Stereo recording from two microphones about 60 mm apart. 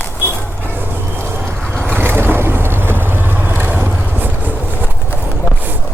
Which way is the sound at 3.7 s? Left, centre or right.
Right.